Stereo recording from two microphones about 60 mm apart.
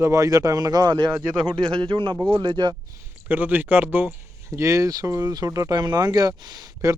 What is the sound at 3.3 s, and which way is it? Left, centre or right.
Speech, right.